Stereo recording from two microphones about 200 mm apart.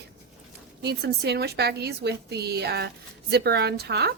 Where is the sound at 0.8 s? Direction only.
55° right (ahead or behind).